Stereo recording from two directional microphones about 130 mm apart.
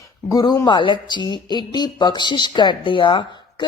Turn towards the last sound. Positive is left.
turn(degrees=35)  # may be behind; listen again after turning